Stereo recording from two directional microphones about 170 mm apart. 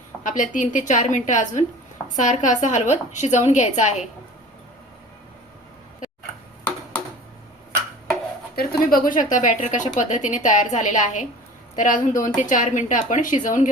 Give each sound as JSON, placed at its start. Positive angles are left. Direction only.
{"t": 0.2, "sound": "a woman's voice", "side_deg": 45}
{"t": 8.5, "sound": "a woman's voice", "side_deg": 55}